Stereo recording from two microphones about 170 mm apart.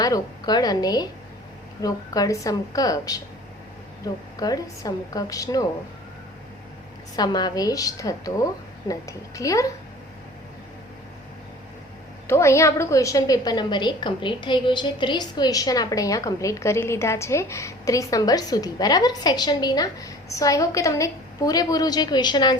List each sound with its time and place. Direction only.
0.0 s a woman's voice: 20° left (ahead or behind)
7.2 s a woman's voice: 25° left (ahead or behind)
12.3 s a woman's voice: 15° left (ahead or behind)